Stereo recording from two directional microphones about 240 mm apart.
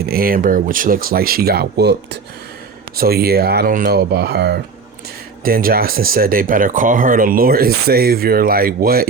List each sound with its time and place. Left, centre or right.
0.0 s speech: right